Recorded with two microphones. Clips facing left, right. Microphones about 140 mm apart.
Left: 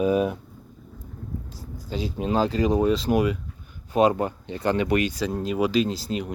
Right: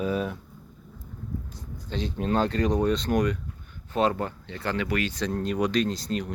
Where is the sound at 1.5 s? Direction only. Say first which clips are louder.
Left 4 dB; 5° left (ahead or behind).